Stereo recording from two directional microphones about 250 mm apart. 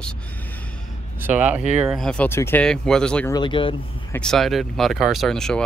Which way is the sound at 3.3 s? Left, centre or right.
Centre.